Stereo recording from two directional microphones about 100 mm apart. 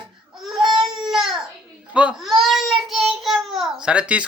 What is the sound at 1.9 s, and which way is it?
Speech, 10° right (ahead or behind).